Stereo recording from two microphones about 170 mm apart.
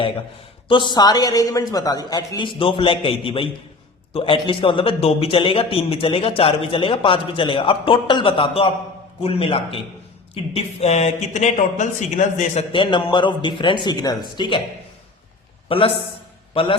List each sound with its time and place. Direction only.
0.7 s a man's voice: 25° left (ahead or behind); by 12.6 s 45° left (ahead or behind)
12.7 s a man's voice: 30° left (ahead or behind)
15.7 s a man's voice: 35° left (ahead or behind)